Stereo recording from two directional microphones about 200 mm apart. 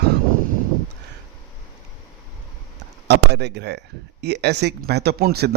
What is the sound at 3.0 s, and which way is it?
Speech, 55° right (ahead or behind).